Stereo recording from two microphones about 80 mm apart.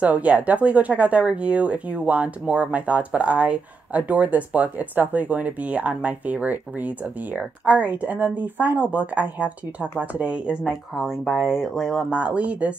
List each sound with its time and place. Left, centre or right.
0.0 s speech: centre
12.2 s speech: centre